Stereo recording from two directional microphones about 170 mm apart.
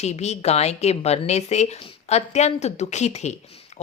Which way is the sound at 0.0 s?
40° left (ahead or behind).